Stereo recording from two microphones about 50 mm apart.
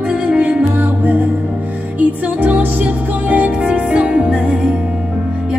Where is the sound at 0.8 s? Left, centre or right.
Right.